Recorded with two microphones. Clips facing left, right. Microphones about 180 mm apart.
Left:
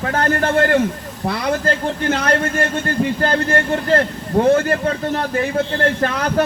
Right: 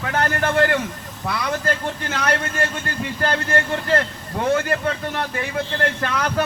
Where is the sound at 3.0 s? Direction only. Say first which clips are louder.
Left 5 dB; 40° left (ahead or behind).